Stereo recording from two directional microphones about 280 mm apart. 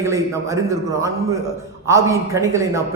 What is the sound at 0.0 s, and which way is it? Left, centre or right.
A man's voice, centre.